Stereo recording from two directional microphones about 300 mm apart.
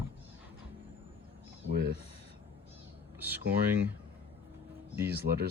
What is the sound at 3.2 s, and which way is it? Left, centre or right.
Speech, centre.